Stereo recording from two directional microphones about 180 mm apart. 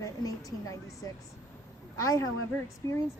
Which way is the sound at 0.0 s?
20° left (ahead or behind).